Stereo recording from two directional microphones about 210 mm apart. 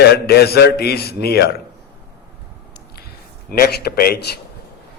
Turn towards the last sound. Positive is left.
turn(degrees=50)  # may be behind; listen again after turning